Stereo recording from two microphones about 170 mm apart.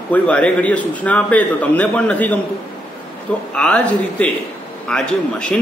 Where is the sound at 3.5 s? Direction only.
10° left (ahead or behind).